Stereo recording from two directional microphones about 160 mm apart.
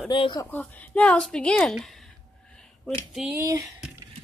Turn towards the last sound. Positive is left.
turn(degrees=-20)  # may be behind; listen again after turning